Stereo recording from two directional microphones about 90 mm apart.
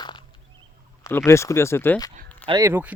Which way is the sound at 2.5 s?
80° right.